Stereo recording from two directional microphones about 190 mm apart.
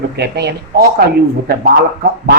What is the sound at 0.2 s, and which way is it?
Speech, 60° right (ahead or behind).